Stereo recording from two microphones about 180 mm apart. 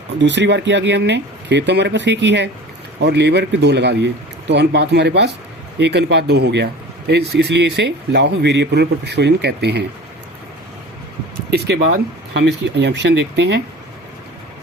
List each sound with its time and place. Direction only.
0.2 s speech: 75° right (ahead or behind)
11.5 s speech: 65° right (ahead or behind)